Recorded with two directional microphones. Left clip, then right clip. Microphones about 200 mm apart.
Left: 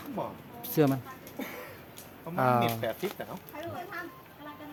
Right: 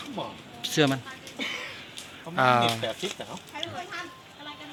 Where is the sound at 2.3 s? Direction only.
5° left (ahead or behind).